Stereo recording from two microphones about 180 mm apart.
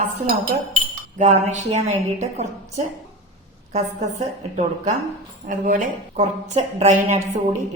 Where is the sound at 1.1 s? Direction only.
40° right (ahead or behind).